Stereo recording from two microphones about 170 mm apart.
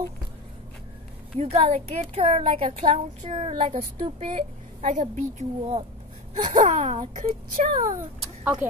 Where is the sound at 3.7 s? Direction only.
45° right (ahead or behind).